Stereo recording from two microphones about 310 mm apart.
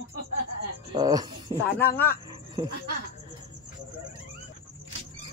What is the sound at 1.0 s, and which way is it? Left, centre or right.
Speech, centre.